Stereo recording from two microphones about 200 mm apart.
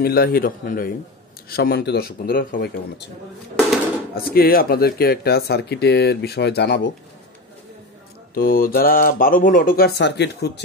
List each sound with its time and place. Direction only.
0.0 s speech: 50° left (ahead or behind)
4.1 s speech: 50° left (ahead or behind)
8.4 s speech: 45° left (ahead or behind)